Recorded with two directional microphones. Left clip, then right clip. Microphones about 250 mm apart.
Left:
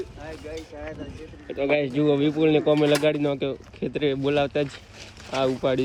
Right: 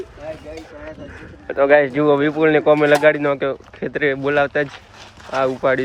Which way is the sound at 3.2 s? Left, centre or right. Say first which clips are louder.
Right 7 dB; centre.